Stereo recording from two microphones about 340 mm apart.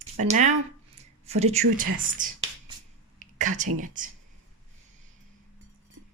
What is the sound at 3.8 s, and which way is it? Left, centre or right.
Speech, right.